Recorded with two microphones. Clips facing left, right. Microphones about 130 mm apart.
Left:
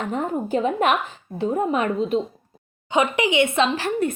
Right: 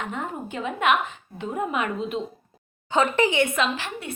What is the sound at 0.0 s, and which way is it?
A woman's voice, 35° left (ahead or behind).